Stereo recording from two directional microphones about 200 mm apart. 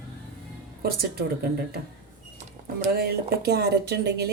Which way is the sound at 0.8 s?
50° right (ahead or behind).